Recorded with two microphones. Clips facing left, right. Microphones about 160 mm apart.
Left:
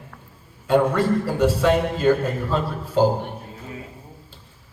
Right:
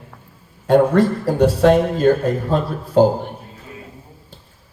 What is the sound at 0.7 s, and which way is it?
A man's voice, 45° right (ahead or behind).